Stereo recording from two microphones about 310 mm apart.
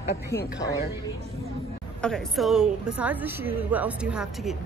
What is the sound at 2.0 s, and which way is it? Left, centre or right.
A woman's voice, centre.